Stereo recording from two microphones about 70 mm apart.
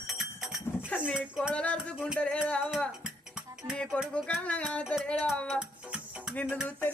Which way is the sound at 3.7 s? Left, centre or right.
Centre.